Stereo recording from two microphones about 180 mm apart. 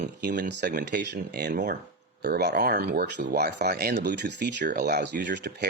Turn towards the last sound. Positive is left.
turn(degrees=-65)  # may be behind; listen again after turning